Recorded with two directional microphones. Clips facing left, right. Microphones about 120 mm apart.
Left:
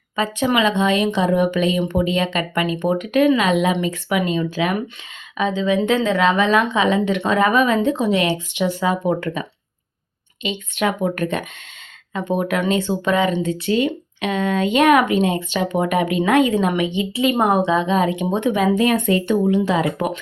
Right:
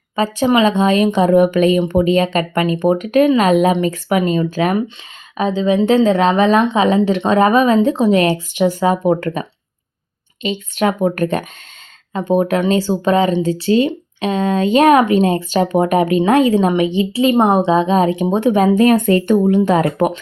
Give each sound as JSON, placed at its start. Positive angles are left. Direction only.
{"t": 0.2, "sound": "speech", "side_deg": -35}